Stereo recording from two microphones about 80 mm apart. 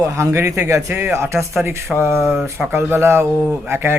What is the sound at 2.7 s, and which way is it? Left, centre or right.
Speech, right.